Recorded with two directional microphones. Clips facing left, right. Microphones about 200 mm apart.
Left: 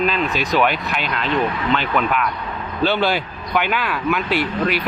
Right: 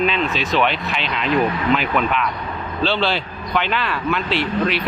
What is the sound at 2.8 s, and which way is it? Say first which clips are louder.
Speech: left 2 dB; 10° left (ahead or behind).